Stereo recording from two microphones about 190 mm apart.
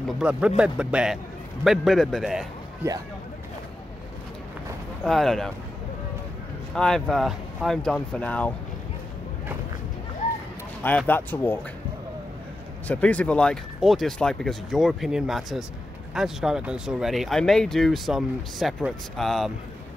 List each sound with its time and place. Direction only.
0.2 s speech: 5° right (ahead or behind)
2.8 s speech: 10° right (ahead or behind)
5.0 s speech: centre (ahead or behind)
6.7 s speech: 5° left (ahead or behind)
10.8 s speech: 10° left (ahead or behind)
12.8 s speech: 5° left (ahead or behind)